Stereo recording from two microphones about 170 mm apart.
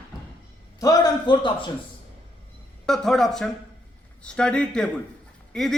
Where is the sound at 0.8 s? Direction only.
20° left (ahead or behind).